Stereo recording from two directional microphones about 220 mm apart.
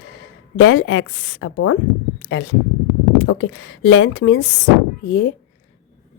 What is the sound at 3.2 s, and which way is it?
A woman's voice, 60° left (ahead or behind).